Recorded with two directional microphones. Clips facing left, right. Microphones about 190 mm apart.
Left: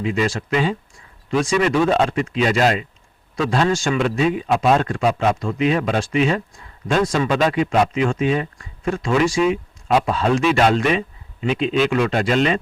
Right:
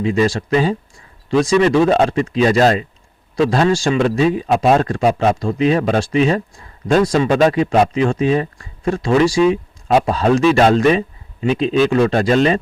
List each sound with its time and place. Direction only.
0.0 s speech: 35° right (ahead or behind)